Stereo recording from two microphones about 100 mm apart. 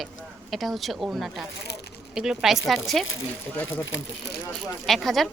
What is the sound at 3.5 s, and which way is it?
Speech, 15° left (ahead or behind).